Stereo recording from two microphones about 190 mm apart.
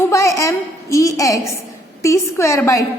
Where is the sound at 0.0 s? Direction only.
15° left (ahead or behind).